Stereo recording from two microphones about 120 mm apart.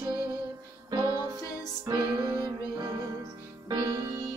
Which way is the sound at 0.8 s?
30° right (ahead or behind).